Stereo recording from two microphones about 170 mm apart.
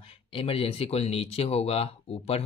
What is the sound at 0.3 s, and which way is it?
Speech, 35° left (ahead or behind).